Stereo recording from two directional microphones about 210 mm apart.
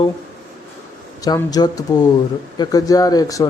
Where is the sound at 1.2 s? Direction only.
20° left (ahead or behind).